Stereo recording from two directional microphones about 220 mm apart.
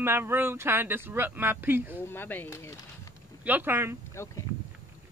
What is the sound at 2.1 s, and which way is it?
Speech, 10° left (ahead or behind).